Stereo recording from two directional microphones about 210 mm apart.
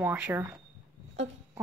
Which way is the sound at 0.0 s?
10° right (ahead or behind).